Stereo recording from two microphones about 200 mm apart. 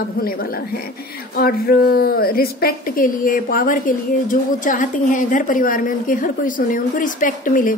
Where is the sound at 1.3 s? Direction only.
50° left (ahead or behind).